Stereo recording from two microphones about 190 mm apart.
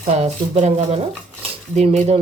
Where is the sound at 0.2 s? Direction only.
35° right (ahead or behind).